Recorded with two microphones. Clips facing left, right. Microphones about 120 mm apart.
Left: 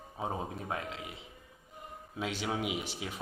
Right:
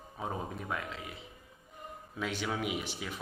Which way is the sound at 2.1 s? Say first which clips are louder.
Even; 25° left (ahead or behind).